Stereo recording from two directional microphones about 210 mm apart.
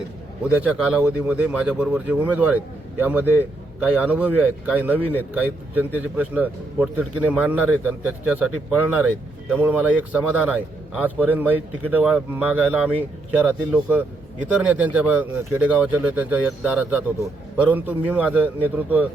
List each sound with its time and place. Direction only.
0.4 s a man's voice: 5° right (ahead or behind)
9.5 s a man's voice: 10° right (ahead or behind)